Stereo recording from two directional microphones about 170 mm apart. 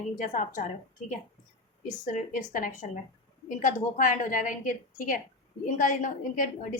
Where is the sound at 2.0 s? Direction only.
50° left (ahead or behind).